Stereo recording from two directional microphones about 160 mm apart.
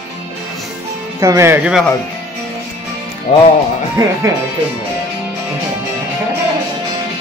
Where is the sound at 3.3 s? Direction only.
50° left (ahead or behind).